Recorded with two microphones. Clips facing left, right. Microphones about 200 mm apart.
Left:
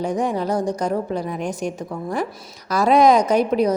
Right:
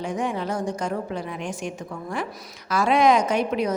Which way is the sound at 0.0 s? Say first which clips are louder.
Left 5 dB; 40° left (ahead or behind).